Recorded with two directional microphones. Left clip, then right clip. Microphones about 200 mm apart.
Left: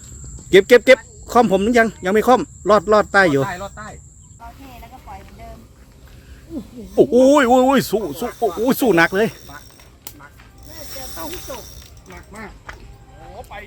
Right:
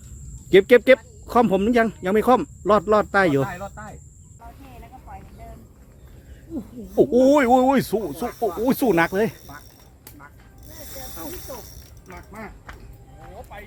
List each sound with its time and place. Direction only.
0.5 s speech: 5° left (ahead or behind)
3.4 s speech: 35° left (ahead or behind)
6.9 s speech: 10° left (ahead or behind)
8.4 s speech: 5° right (ahead or behind)
8.6 s speech: 10° left (ahead or behind)
12.1 s speech: 5° right (ahead or behind)
13.5 s a sound: 40° left (ahead or behind)